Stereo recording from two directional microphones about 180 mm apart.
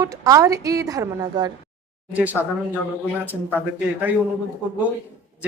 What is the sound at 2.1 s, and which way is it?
Speech, 10° right (ahead or behind).